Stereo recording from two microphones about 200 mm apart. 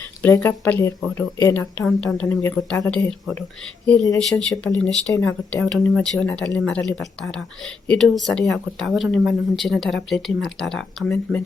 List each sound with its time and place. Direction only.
0.2 s speech: 10° left (ahead or behind)
1.8 s speech: centre (ahead or behind)